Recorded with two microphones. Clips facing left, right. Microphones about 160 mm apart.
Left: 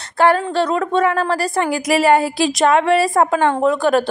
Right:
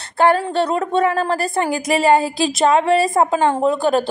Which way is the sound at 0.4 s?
35° right (ahead or behind).